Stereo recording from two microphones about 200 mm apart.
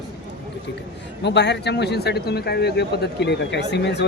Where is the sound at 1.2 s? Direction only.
60° left (ahead or behind).